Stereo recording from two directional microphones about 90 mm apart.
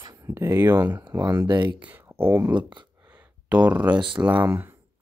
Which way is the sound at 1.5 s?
60° right (ahead or behind).